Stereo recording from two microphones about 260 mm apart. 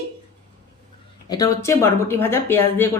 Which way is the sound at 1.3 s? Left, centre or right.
Centre.